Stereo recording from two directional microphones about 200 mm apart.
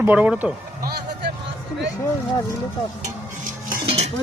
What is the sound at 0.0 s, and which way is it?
Speech, 10° right (ahead or behind).